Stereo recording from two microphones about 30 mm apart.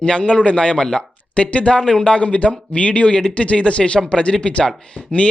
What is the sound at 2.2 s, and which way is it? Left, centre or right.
A man's voice, left.